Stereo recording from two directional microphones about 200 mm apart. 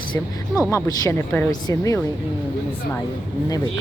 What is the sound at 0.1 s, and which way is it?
Speech, 15° left (ahead or behind).